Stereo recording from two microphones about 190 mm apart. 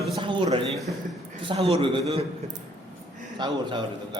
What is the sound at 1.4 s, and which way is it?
Speech, 30° right (ahead or behind).